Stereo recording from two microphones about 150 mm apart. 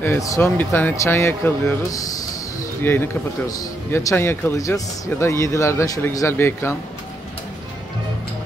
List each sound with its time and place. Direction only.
0.0 s speech: 20° left (ahead or behind)